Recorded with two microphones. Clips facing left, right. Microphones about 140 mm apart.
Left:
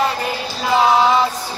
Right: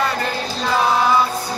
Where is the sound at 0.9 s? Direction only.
20° left (ahead or behind).